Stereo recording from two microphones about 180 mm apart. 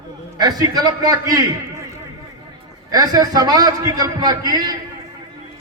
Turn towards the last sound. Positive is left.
turn(degrees=-20)  # may be behind; listen again after turning